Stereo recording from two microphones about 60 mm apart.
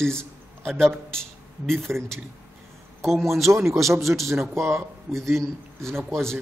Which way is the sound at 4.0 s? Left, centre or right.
Centre.